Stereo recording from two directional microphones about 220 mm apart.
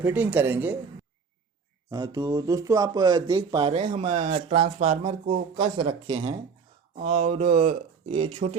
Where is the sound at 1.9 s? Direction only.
20° right (ahead or behind).